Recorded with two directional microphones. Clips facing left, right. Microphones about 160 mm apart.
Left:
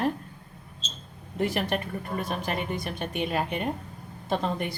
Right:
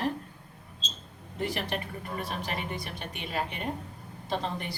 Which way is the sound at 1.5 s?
50° left (ahead or behind).